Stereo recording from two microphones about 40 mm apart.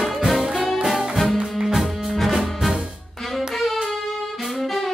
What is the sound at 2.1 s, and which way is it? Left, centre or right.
Music, centre.